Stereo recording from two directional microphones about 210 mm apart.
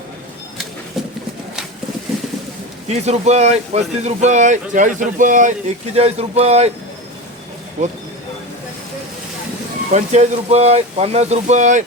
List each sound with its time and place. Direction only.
2.8 s speech: 30° right (ahead or behind)
7.8 s speech: 35° right (ahead or behind)
9.9 s speech: 35° right (ahead or behind)